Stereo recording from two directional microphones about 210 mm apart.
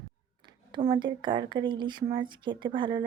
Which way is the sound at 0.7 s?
20° right (ahead or behind).